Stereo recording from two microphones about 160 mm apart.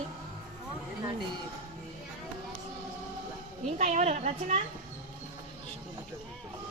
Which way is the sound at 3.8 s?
45° right (ahead or behind).